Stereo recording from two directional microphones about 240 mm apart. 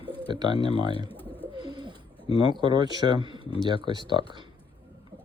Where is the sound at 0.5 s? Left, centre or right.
Left.